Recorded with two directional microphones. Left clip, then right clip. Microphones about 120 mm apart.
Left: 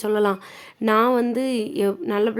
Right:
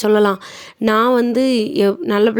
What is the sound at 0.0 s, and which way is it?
Speech, 45° right (ahead or behind).